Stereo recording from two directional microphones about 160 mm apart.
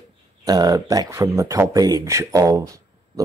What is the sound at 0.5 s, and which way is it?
Speech, 25° right (ahead or behind).